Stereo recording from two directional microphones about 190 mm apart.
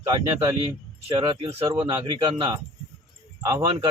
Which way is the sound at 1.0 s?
25° right (ahead or behind).